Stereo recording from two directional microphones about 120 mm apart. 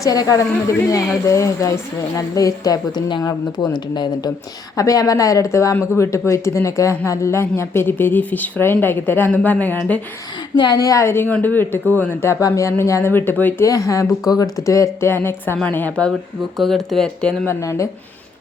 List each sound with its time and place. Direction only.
0.0 s speech: 30° left (ahead or behind); by 10.0 s 15° left (ahead or behind)
10.5 s speech: 35° left (ahead or behind); by 13.7 s 15° left (ahead or behind)
13.7 s a woman's voice: 25° left (ahead or behind); by 17.5 s 10° left (ahead or behind)
17.5 s speech: 25° left (ahead or behind)